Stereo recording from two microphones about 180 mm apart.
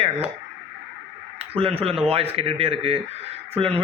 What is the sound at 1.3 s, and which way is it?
Radio, 30° right (ahead or behind).